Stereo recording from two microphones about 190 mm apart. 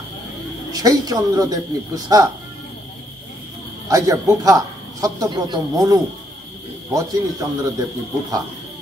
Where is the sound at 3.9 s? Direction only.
20° right (ahead or behind).